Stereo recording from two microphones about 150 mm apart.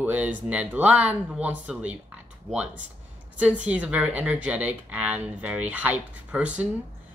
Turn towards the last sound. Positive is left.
turn(degrees=-10)  # may be behind; listen again after turning